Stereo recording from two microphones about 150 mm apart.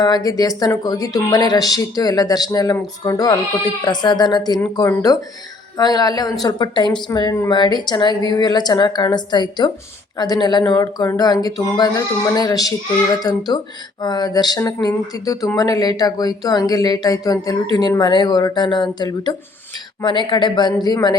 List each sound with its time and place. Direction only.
0.0 s speech: 25° left (ahead or behind)